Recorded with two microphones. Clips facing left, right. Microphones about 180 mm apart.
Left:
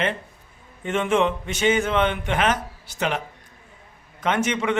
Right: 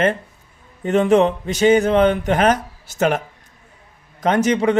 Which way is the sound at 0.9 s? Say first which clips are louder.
Right 7 dB; 40° right (ahead or behind).